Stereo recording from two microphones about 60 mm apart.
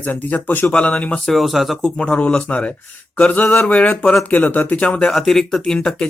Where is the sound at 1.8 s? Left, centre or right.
Centre.